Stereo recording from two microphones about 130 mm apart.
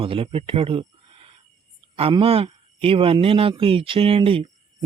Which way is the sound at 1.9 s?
45° right (ahead or behind).